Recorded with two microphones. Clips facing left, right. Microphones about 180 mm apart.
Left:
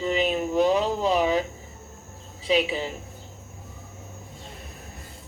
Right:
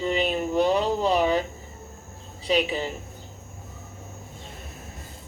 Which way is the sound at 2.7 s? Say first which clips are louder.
Right 1 dB; centre (ahead or behind).